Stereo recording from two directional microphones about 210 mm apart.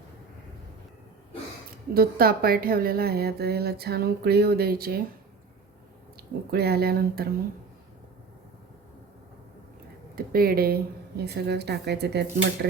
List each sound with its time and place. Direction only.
1.9 s a woman's voice: 45° right (ahead or behind)
6.5 s a woman's voice: 50° right (ahead or behind)
10.2 s a woman's voice: 45° right (ahead or behind)